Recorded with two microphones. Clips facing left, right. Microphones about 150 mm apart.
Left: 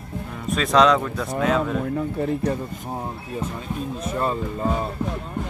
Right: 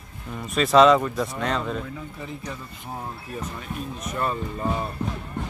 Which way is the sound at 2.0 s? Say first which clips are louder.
Left 12 dB; 60° left (ahead or behind).